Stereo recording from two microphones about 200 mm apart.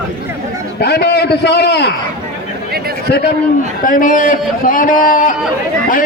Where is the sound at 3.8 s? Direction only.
40° left (ahead or behind).